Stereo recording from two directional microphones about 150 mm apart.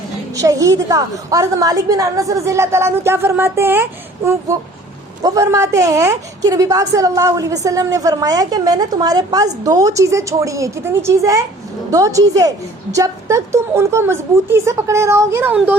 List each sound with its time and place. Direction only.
0.3 s a woman's voice: 20° right (ahead or behind)
5.2 s a woman's voice: 20° right (ahead or behind)